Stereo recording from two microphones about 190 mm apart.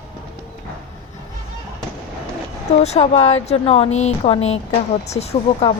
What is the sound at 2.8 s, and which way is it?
Speech, 35° left (ahead or behind).